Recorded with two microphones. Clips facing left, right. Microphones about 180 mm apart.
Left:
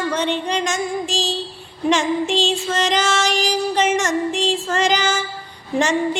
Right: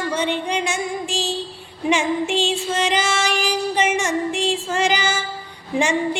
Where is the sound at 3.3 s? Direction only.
55° right (ahead or behind).